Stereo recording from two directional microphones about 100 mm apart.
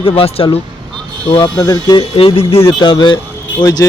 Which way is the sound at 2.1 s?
70° left (ahead or behind).